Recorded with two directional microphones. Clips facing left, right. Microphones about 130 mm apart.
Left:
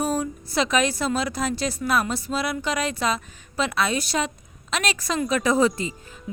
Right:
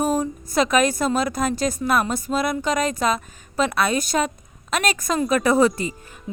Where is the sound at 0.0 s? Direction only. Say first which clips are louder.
Right 3 dB; 45° right (ahead or behind).